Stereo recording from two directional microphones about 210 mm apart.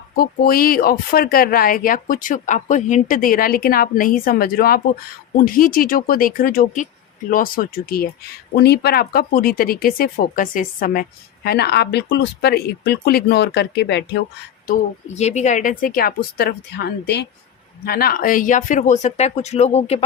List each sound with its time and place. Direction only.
0.2 s speech: 45° left (ahead or behind)
14.7 s speech: 30° left (ahead or behind)